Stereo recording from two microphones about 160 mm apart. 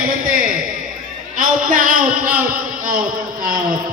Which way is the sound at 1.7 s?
60° right (ahead or behind).